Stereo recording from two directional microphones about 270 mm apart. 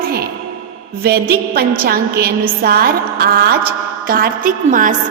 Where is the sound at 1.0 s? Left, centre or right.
Right.